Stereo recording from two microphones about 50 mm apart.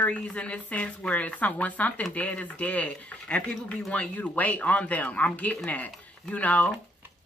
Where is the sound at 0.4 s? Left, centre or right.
Left.